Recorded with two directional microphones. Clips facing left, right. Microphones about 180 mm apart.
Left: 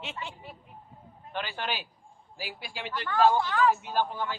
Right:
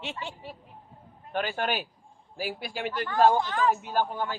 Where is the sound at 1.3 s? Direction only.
45° right (ahead or behind).